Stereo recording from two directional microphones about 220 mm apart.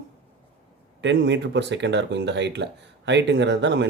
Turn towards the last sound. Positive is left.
turn(degrees=-55)  # may be behind; listen again after turning